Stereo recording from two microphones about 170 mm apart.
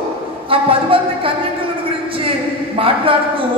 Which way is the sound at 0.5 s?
30° right (ahead or behind).